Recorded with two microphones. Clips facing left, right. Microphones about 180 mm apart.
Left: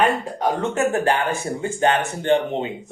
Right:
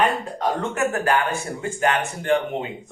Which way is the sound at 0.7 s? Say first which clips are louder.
Left 2 dB; 25° left (ahead or behind).